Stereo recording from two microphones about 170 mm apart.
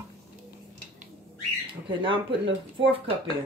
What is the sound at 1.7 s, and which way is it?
Speech, 30° right (ahead or behind).